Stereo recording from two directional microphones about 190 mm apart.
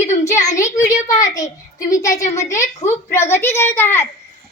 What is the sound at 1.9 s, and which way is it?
A woman's voice, 15° left (ahead or behind).